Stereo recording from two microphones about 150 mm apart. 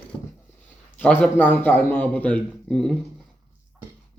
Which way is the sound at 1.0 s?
10° left (ahead or behind).